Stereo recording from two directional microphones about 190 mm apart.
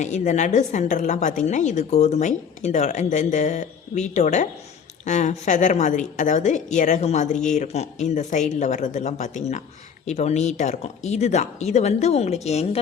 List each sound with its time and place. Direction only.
0.0 s a woman's voice: 40° left (ahead or behind)